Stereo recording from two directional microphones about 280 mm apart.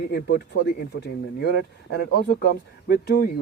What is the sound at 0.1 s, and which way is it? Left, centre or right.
Speech, left.